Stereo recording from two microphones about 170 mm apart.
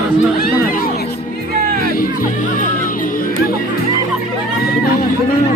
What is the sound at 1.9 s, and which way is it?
Music, 55° left (ahead or behind).